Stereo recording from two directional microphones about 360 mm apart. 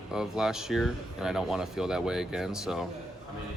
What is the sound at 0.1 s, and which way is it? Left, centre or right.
Speech, centre.